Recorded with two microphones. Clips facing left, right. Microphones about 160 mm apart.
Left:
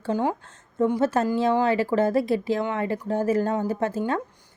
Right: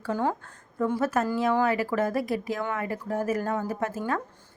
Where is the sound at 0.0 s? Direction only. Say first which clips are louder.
Left 3 dB; 20° left (ahead or behind).